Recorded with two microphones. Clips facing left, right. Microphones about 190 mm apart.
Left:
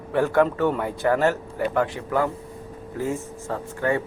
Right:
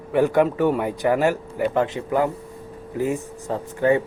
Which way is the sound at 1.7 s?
20° right (ahead or behind).